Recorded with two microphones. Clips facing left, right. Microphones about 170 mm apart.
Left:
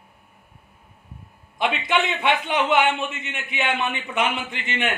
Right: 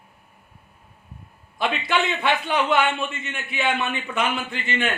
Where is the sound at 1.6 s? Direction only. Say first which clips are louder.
Left 1 dB; 20° left (ahead or behind).